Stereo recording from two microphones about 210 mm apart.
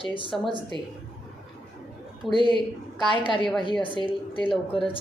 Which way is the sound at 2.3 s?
20° right (ahead or behind).